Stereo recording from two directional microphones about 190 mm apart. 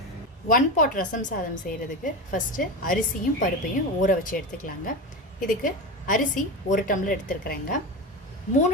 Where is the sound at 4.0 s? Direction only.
45° left (ahead or behind).